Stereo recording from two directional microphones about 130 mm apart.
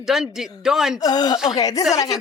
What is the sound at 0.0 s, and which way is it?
Speech, 5° right (ahead or behind).